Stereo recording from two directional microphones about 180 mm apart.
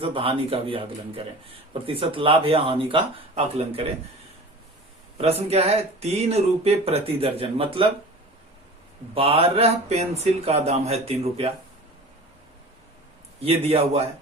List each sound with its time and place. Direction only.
0.0 s speech: 30° right (ahead or behind)
5.1 s speech: 35° right (ahead or behind)
9.1 s speech: 30° right (ahead or behind)
13.4 s speech: 35° right (ahead or behind)